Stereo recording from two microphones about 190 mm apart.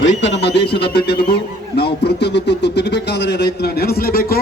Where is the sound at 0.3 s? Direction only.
65° left (ahead or behind).